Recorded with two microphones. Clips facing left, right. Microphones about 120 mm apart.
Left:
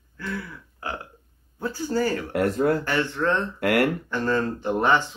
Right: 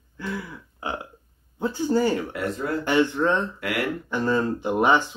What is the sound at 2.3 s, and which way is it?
Speech, 55° left (ahead or behind).